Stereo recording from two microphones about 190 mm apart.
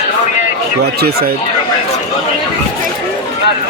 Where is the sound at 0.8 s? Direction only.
55° right (ahead or behind).